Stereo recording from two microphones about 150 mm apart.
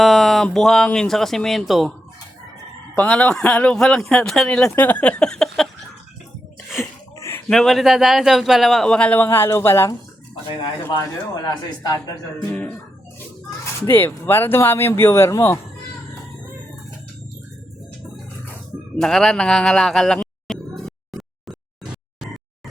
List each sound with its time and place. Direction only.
0.0 s speech: centre (ahead or behind)
2.9 s speech: 10° left (ahead or behind)
7.2 s a sound: 15° left (ahead or behind)
7.5 s speech: centre (ahead or behind); by 9.9 s 20° left (ahead or behind)
11.3 s speech: 25° left (ahead or behind)
12.5 s speech: 10° left (ahead or behind)
13.8 s speech: 15° left (ahead or behind)
18.9 s a sound: centre (ahead or behind)